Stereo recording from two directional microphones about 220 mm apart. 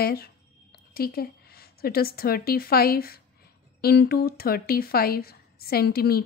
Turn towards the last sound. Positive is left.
turn(degrees=45)  # may be behind; listen again after turning